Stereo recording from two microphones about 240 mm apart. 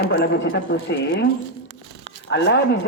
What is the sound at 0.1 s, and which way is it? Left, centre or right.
Speech, left.